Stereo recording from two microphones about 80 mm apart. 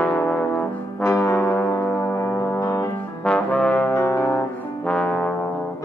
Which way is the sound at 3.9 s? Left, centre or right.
Left.